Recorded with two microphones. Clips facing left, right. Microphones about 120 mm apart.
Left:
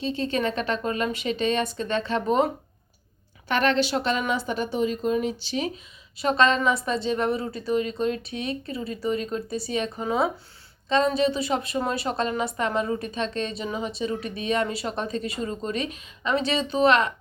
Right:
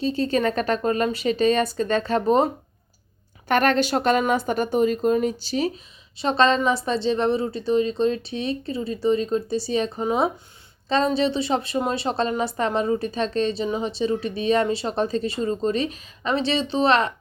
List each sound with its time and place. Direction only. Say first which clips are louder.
0.0 s speech: right 4 dB; 40° right (ahead or behind)
3.5 s a woman's voice: right 3 dB; 50° right (ahead or behind); by 17.1 s 30° right (ahead or behind)